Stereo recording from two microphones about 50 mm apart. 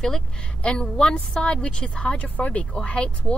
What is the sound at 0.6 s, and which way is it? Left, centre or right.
Speech, left.